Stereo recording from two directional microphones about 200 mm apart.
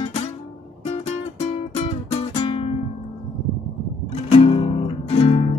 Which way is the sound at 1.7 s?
30° left (ahead or behind).